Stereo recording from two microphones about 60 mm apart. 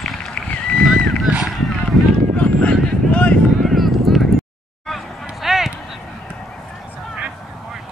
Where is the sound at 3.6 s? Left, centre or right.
Centre.